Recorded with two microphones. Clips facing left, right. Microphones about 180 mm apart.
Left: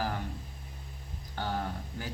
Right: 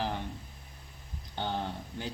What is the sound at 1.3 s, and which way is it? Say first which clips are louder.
Speech: even; 25° right (ahead or behind).